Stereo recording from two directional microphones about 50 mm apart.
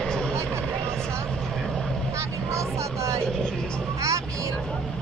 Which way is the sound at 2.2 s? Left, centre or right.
Right.